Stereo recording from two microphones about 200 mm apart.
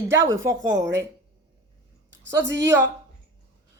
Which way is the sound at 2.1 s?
65° right (ahead or behind).